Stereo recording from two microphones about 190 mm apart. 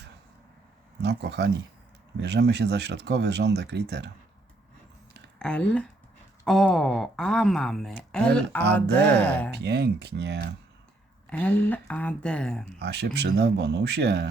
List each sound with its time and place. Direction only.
1.0 s speech: 65° right (ahead or behind)
5.4 s speech: 5° left (ahead or behind)
9.5 s speech: 60° right (ahead or behind)
11.3 s speech: 10° left (ahead or behind)
12.8 s speech: 65° right (ahead or behind)